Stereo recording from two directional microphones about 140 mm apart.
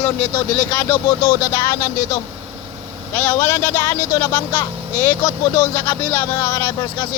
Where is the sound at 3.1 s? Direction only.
15° left (ahead or behind).